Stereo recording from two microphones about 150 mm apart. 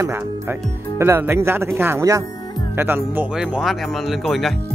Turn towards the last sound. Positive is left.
turn(degrees=0)  # may be behind; listen again after turning